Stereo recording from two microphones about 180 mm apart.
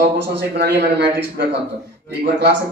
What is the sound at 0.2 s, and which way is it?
A man's voice, 70° right (ahead or behind).